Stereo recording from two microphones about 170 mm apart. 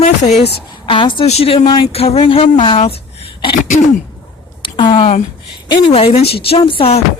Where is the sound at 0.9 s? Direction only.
30° left (ahead or behind).